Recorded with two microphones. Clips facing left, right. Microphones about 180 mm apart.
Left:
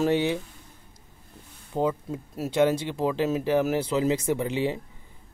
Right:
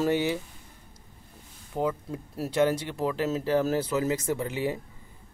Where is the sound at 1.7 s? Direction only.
20° left (ahead or behind).